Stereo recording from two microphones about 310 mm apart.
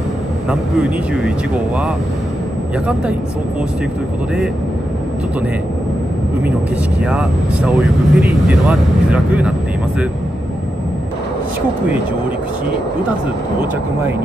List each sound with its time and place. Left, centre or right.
0.5 s speech: centre
7.0 s speech: centre